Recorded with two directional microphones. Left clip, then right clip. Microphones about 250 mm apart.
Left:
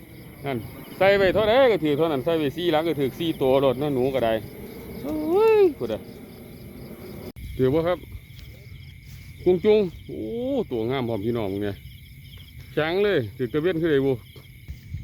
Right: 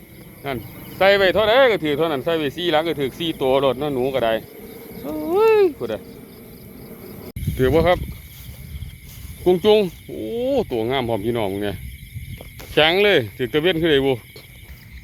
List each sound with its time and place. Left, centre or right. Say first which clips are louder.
0.4 s speech: right 2 dB; centre
7.5 s speech: right 6 dB; centre
9.4 s speech: right 4 dB; centre